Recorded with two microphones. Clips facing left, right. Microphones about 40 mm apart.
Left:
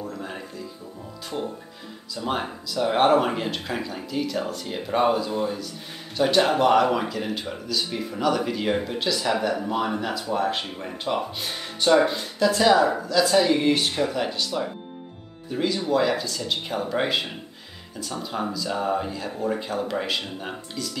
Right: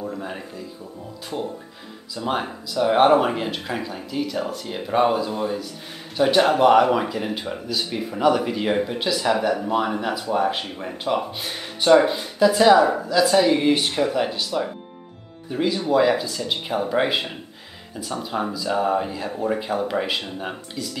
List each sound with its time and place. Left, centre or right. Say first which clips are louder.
0.0 s music: right 3 dB; centre
1.3 s speech: right 2 dB; centre